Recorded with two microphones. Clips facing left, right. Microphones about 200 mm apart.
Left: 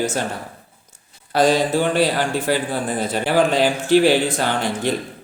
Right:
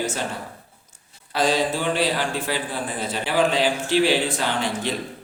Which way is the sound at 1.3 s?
45° left (ahead or behind).